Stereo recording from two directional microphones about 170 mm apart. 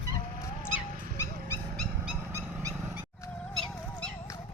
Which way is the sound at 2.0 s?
15° right (ahead or behind).